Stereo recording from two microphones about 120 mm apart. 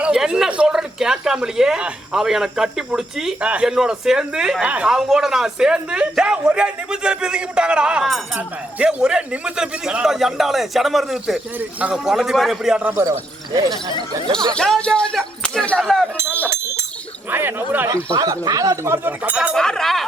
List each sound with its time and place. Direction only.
0.0 s speech: 5° right (ahead or behind)
13.0 s speech: 30° right (ahead or behind)
14.5 s speech: 5° left (ahead or behind)
17.2 s speech: 15° right (ahead or behind)
17.8 s speech: 25° right (ahead or behind)
19.5 s speech: 5° left (ahead or behind)